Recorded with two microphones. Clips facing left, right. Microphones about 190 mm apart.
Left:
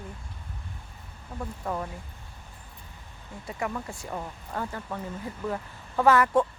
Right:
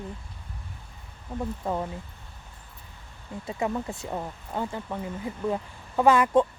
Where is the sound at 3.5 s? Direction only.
25° right (ahead or behind).